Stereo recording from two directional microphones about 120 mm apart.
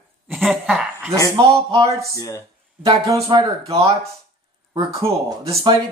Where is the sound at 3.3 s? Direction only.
40° right (ahead or behind).